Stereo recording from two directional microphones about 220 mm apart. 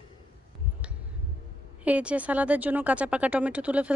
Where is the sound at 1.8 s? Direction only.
5° right (ahead or behind).